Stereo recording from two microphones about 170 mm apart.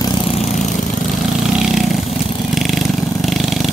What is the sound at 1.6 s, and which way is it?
Vehicle, centre (ahead or behind).